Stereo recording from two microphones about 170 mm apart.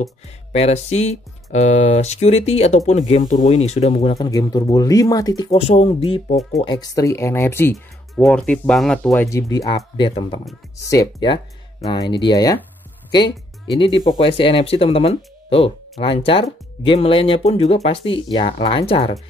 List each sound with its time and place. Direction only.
0.0 s speech: 40° left (ahead or behind)
3.6 s speech: 40° left (ahead or behind)
4.3 s speech: 25° left (ahead or behind)
5.5 s speech: 35° left (ahead or behind); by 7.7 s 15° left (ahead or behind)
7.7 s speech: centre (ahead or behind)
9.5 s speech: 25° left (ahead or behind)
9.8 s speech: 35° left (ahead or behind)
10.8 s speech: 20° left (ahead or behind)